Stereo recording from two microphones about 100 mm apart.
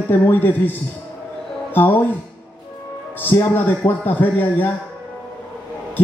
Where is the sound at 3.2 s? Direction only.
20° left (ahead or behind).